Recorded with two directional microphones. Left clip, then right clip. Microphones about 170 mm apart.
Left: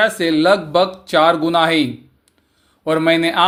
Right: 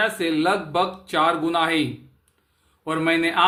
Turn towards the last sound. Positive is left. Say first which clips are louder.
# left 6 dB
turn(degrees=35)  # may be behind; listen again after turning